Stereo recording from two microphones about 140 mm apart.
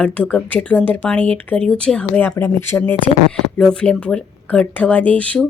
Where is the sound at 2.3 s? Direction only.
15° left (ahead or behind).